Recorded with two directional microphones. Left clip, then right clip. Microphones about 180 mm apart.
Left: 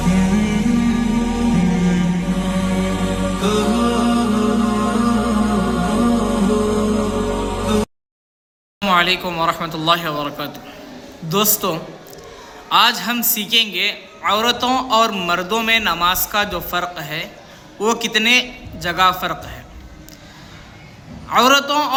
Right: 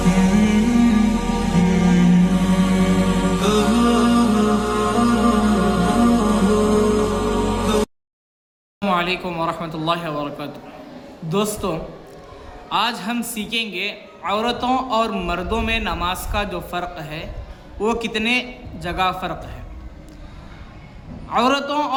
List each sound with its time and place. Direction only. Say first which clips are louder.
0.0 s music: right 1 dB; centre (ahead or behind)
8.8 s a man's voice: left 5 dB; centre (ahead or behind)
21.2 s a man's voice: left 5 dB; centre (ahead or behind)